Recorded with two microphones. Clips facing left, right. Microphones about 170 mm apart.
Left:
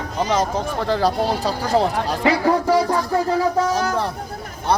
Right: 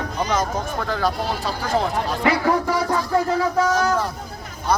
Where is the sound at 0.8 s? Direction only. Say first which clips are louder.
Left 6 dB; 30° left (ahead or behind).